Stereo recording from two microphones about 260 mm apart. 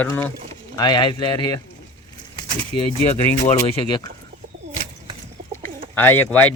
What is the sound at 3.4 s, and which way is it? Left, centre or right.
Speech, centre.